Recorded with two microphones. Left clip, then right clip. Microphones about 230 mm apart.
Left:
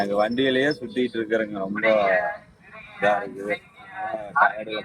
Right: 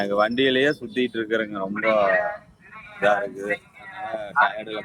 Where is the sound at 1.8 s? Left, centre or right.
Centre.